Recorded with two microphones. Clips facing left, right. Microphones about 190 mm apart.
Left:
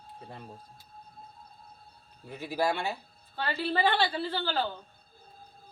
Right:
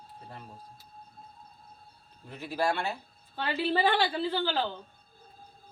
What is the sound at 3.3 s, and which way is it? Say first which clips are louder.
A woman's voice: right 2 dB; 15° right (ahead or behind).